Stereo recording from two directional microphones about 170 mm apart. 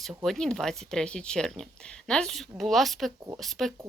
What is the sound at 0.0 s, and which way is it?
Speech, centre (ahead or behind).